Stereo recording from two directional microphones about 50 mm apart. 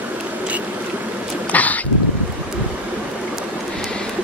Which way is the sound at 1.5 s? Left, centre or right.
Left.